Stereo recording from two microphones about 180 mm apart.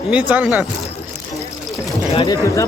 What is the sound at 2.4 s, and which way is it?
Speech, 15° left (ahead or behind).